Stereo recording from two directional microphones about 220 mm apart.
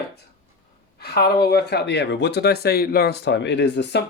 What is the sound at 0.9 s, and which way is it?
Speech, 45° left (ahead or behind).